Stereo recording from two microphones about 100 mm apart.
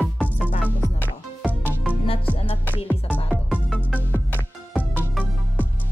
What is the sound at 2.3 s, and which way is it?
Music, 75° left (ahead or behind).